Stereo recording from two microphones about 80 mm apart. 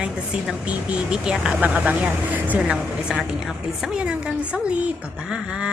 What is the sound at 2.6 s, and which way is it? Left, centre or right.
A woman's voice, centre.